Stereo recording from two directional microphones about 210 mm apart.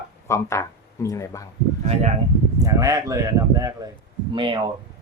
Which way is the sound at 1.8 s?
30° right (ahead or behind).